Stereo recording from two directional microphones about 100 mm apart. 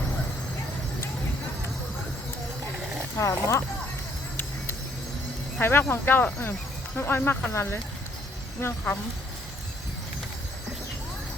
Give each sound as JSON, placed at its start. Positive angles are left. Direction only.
{"t": 3.2, "sound": "speech", "side_deg": 30}
{"t": 5.5, "sound": "speech", "side_deg": 20}